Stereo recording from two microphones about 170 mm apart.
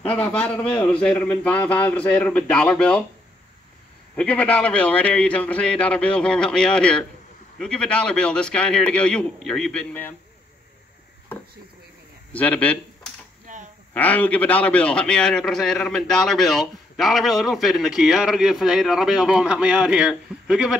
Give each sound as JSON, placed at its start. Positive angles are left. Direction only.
{"t": 0.0, "sound": "a man's voice", "side_deg": 10}
{"t": 4.2, "sound": "a man's voice", "side_deg": 10}
{"t": 12.3, "sound": "speech", "side_deg": 10}
{"t": 13.5, "sound": "a sound", "side_deg": -50}
{"t": 13.9, "sound": "a man's voice", "side_deg": 10}